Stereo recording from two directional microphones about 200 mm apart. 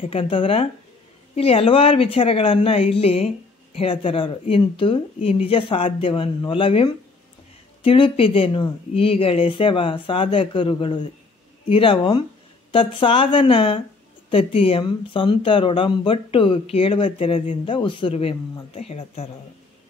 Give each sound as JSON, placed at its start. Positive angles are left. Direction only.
{"t": 0.0, "sound": "speech", "side_deg": 25}